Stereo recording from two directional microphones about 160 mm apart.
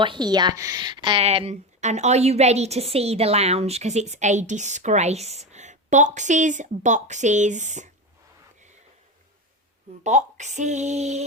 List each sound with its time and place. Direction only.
0.0 s a woman's voice: 30° right (ahead or behind); by 7.9 s 50° right (ahead or behind)
10.0 s a woman's voice: 50° right (ahead or behind)